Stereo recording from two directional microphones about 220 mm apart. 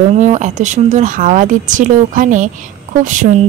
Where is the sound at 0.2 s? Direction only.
30° right (ahead or behind).